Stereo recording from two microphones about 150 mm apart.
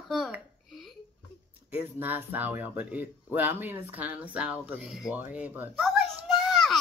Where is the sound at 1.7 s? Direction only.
10° right (ahead or behind).